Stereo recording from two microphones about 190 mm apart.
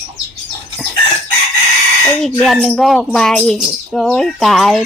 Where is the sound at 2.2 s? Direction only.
Centre (ahead or behind).